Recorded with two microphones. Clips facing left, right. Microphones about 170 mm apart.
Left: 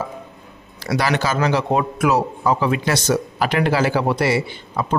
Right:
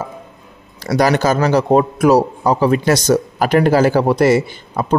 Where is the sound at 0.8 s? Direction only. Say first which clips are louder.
Right 6 dB; 40° right (ahead or behind).